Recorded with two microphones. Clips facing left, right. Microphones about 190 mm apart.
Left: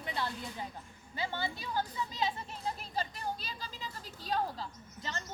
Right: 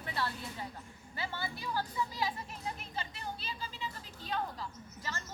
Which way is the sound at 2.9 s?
40° left (ahead or behind).